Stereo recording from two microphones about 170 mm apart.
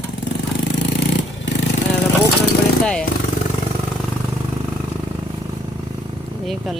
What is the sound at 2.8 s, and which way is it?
Speech, 5° left (ahead or behind).